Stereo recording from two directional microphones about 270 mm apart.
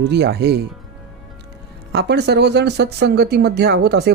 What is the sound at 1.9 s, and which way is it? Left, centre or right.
Speech, right.